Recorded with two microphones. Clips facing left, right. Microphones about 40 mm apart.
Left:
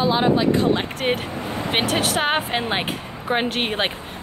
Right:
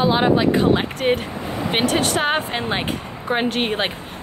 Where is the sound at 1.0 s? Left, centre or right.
Centre.